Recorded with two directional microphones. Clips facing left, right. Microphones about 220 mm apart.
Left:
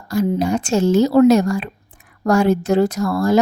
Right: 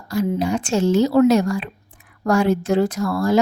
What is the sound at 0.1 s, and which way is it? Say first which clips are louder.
A woman's voice: left 2 dB; 45° left (ahead or behind).